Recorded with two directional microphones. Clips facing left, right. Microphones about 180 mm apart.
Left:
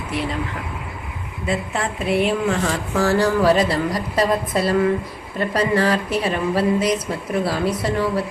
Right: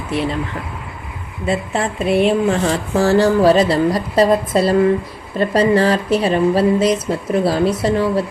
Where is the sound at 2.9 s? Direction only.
30° right (ahead or behind).